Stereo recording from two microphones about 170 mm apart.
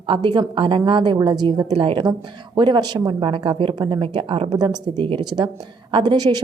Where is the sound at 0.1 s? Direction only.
25° right (ahead or behind).